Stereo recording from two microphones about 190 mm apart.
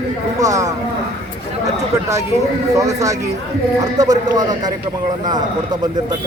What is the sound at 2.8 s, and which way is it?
Speech, 15° right (ahead or behind).